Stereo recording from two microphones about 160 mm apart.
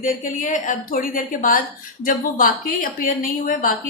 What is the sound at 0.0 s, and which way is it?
A woman's voice, 55° left (ahead or behind).